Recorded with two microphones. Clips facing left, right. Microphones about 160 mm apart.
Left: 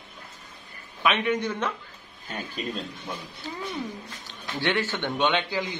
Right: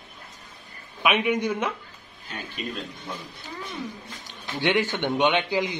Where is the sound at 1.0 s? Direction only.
15° right (ahead or behind).